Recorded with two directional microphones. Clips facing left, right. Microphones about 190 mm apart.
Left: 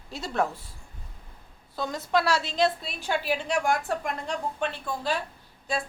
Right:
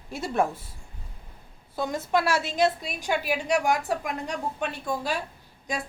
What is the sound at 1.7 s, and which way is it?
A woman's voice, 15° right (ahead or behind).